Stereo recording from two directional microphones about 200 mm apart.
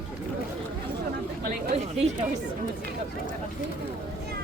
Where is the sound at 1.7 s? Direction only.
30° right (ahead or behind).